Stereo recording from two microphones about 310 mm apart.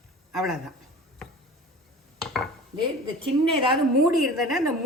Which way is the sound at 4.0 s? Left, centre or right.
Centre.